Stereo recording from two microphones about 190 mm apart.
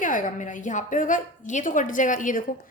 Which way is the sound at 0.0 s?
45° left (ahead or behind).